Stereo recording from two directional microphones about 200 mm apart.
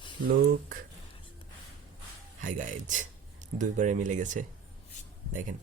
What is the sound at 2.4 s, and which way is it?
Speech, 40° right (ahead or behind).